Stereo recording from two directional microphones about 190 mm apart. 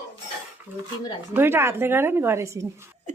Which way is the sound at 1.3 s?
10° right (ahead or behind).